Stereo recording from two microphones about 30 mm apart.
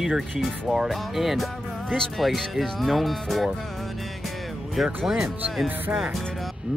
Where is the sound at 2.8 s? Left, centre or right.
Centre.